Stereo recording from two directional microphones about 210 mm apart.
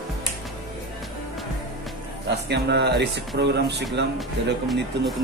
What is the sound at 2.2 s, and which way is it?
Speech, 50° right (ahead or behind).